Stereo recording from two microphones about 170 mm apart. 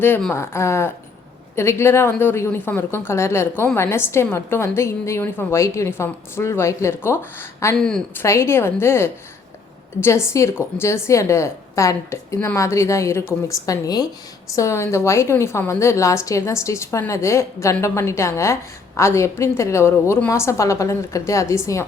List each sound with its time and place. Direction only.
0.0 s a woman's voice: 10° left (ahead or behind)
7.8 s a woman's voice: 5° left (ahead or behind)
8.2 s a woman's voice: 15° left (ahead or behind)